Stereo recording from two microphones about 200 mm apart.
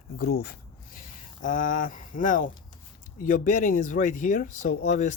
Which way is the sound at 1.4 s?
40° left (ahead or behind).